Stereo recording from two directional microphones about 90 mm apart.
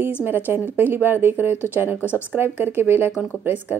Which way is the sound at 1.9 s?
25° left (ahead or behind).